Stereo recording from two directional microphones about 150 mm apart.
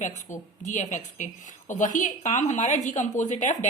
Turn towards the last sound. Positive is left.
turn(degrees=55)  # may be behind; listen again after turning